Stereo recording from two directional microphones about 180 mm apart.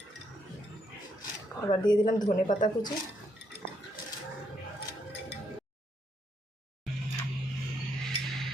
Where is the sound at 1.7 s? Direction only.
25° left (ahead or behind).